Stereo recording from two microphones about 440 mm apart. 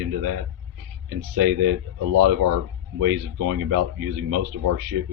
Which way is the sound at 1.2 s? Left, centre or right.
Right.